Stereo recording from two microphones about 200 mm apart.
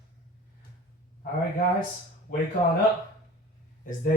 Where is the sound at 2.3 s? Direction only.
40° left (ahead or behind).